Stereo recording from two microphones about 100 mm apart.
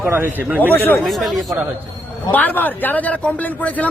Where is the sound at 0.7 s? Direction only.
20° left (ahead or behind).